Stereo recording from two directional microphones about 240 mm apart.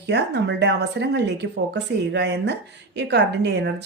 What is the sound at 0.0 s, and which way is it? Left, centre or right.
Speech, right.